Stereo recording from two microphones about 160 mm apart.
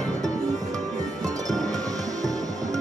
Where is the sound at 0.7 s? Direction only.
20° right (ahead or behind).